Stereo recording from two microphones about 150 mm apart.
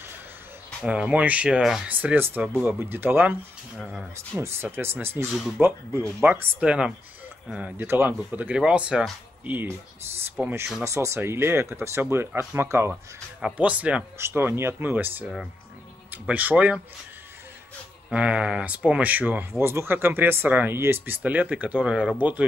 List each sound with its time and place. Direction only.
0.8 s speech: 5° right (ahead or behind)
18.1 s speech: 5° right (ahead or behind)